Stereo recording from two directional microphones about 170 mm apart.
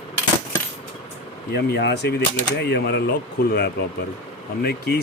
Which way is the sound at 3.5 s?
70° left (ahead or behind).